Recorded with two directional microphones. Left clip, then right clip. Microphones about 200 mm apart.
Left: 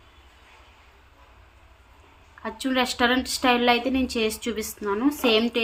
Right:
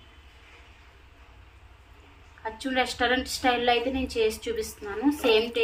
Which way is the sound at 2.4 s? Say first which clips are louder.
Left 2 dB; 55° left (ahead or behind).